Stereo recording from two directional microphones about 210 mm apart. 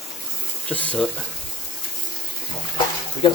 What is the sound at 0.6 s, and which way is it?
Speech, 5° left (ahead or behind).